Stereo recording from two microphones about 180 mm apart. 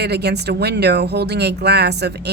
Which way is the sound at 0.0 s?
65° right (ahead or behind).